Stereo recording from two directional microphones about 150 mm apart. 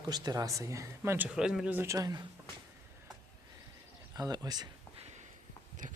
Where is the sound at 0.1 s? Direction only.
25° right (ahead or behind).